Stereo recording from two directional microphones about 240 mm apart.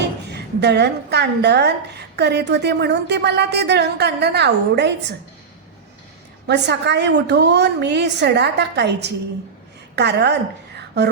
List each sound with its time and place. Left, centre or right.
0.3 s a woman's voice: right
6.5 s a woman's voice: right
10.8 s a sound: right